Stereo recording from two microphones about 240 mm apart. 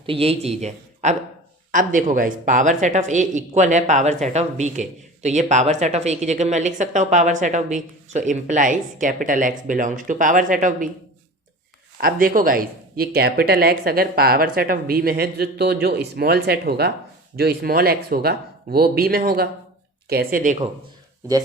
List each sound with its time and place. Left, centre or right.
0.0 s a man's voice: right
11.9 s speech: right